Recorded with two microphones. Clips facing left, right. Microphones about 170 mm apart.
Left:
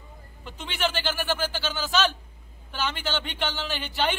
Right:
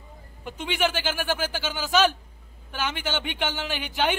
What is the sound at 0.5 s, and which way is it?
Speech, 10° right (ahead or behind).